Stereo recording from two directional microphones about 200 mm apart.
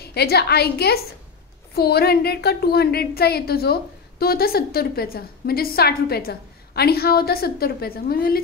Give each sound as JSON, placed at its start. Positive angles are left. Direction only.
{"t": 0.0, "sound": "a woman's voice", "side_deg": 55}